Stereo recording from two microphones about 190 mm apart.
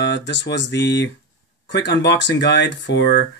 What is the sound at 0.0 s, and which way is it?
Speech, 65° left (ahead or behind).